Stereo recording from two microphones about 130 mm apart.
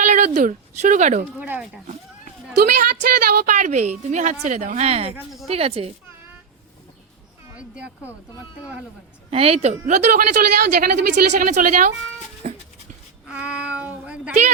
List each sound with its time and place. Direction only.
0.0 s speech: 65° right (ahead or behind)
1.4 s speech: 10° right (ahead or behind)
2.7 s a woman's voice: 90° right; by 5.9 s 50° right (ahead or behind)
9.3 s a woman's voice: 50° right (ahead or behind); by 11.9 s 80° right
12.4 s dog: 55° right (ahead or behind)
13.2 s child singing: 10° right (ahead or behind)